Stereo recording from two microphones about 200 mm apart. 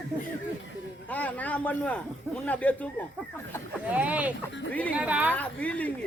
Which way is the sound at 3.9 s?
5° right (ahead or behind).